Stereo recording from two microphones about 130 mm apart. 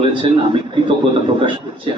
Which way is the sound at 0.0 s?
40° right (ahead or behind).